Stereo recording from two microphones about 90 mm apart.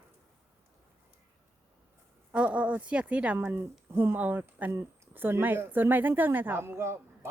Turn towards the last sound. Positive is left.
turn(degrees=-30)  # may be behind; listen again after turning